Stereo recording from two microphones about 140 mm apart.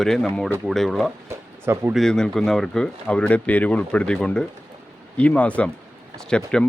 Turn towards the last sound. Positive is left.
turn(degrees=5)  # may be behind; listen again after turning